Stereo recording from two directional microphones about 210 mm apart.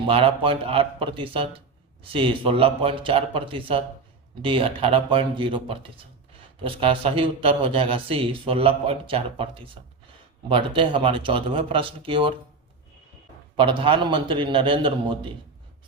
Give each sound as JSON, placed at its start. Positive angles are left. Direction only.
{"t": 0.1, "sound": "a man's voice", "side_deg": -25}
{"t": 13.6, "sound": "a man's voice", "side_deg": -25}